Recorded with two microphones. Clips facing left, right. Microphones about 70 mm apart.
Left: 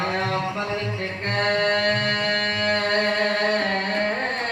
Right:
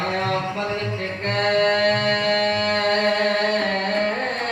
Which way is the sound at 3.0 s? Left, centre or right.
Centre.